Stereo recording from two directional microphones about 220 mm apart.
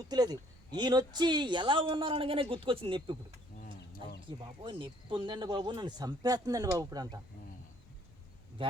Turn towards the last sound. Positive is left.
turn(degrees=-15)  # may be behind; listen again after turning